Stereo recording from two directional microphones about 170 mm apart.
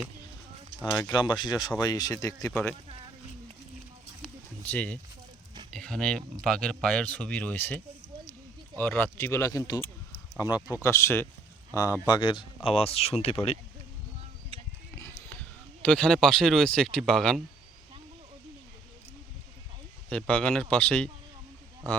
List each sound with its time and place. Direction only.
1.0 s speech: 25° left (ahead or behind)
4.7 s speech: 10° left (ahead or behind)
8.8 s speech: 10° left (ahead or behind); by 13.6 s 35° left (ahead or behind)
14.9 s speech: 15° left (ahead or behind)
20.1 s speech: 5° left (ahead or behind)